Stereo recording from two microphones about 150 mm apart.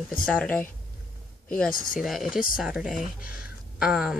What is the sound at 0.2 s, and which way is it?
Speech, 5° left (ahead or behind).